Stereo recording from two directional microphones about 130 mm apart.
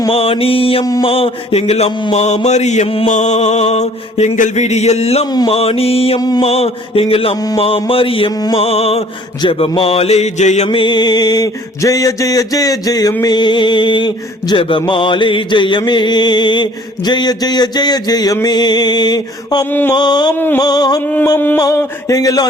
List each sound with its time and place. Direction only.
0.1 s mantra: 45° left (ahead or behind)
6.1 s mantra: 30° left (ahead or behind)
6.4 s mantra: 50° left (ahead or behind)
10.7 s mantra: 40° left (ahead or behind)
21.3 s a sound: 15° left (ahead or behind)
21.6 s mantra: 25° left (ahead or behind)